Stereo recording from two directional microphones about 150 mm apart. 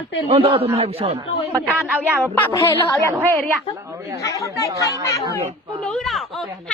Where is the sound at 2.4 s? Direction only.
15° left (ahead or behind).